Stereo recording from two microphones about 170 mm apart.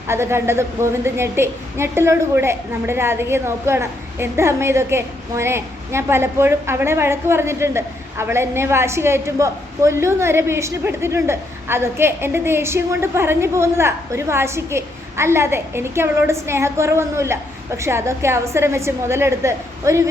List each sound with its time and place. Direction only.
0.1 s a woman's voice: 15° right (ahead or behind)